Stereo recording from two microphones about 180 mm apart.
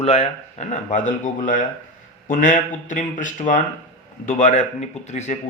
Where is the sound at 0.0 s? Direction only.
35° left (ahead or behind).